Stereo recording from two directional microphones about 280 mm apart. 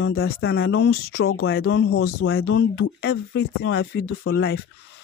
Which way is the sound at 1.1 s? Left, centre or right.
Left.